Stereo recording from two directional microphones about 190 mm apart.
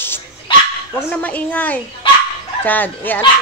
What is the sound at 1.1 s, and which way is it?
Speech, 10° left (ahead or behind).